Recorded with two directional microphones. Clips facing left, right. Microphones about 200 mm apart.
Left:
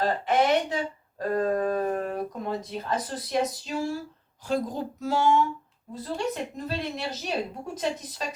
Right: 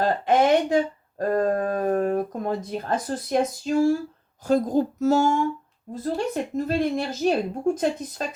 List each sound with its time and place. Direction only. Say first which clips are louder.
0.3 s a woman's voice: right 5 dB; 50° right (ahead or behind)
1.2 s a sound: right 3 dB; 45° right (ahead or behind)
4.4 s a woman's voice: right 7 dB; 45° right (ahead or behind)